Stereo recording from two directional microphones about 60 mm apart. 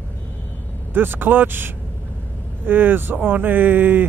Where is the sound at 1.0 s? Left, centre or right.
Right.